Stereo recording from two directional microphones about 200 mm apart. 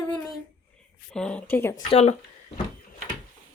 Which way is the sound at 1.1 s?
5° left (ahead or behind).